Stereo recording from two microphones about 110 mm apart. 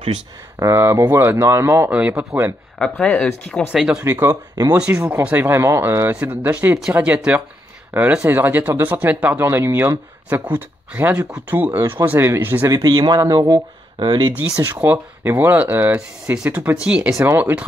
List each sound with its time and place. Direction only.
0.6 s speech: 25° right (ahead or behind)
1.9 s speech: 15° right (ahead or behind)
2.8 s speech: 10° left (ahead or behind)
3.7 s speech: 5° right (ahead or behind)
4.0 s speech: 25° right (ahead or behind)
4.7 s speech: 10° right (ahead or behind)
12.6 s speech: 35° right (ahead or behind)
14.6 s speech: 20° right (ahead or behind)